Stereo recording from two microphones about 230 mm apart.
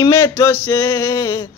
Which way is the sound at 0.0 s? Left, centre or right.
Centre.